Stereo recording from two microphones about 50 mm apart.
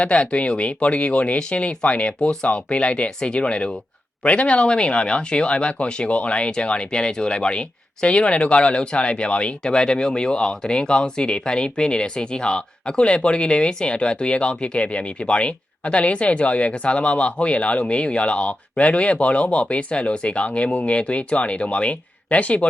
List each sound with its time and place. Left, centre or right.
0.0 s speech: left